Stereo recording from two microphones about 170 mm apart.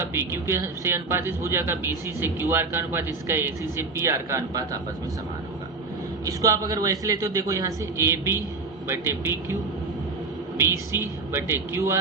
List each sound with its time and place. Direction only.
0.0 s a man's voice: 15° right (ahead or behind)
6.2 s a man's voice: 20° right (ahead or behind)
10.6 s a man's voice: 15° right (ahead or behind)